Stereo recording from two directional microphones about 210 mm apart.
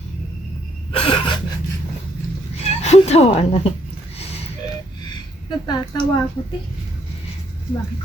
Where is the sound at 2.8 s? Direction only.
30° left (ahead or behind).